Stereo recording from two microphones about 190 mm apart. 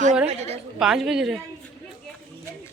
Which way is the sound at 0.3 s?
35° right (ahead or behind).